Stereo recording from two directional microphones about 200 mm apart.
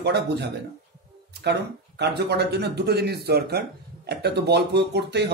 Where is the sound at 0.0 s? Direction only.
55° right (ahead or behind).